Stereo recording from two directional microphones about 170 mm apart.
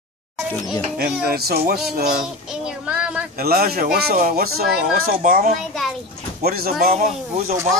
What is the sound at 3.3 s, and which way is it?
Speech, 65° right (ahead or behind).